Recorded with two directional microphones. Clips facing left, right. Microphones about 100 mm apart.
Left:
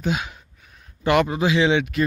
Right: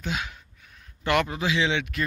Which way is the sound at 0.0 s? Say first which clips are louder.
Left 6 dB; 20° left (ahead or behind).